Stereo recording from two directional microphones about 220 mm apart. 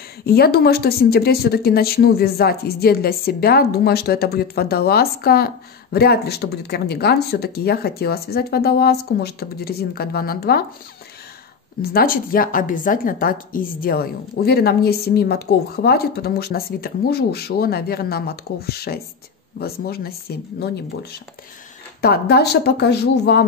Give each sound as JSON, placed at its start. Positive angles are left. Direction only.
{"t": 0.2, "sound": "a woman's voice", "side_deg": 45}
{"t": 11.8, "sound": "a woman's voice", "side_deg": 45}